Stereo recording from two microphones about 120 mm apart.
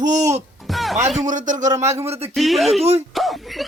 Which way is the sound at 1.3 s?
90° right.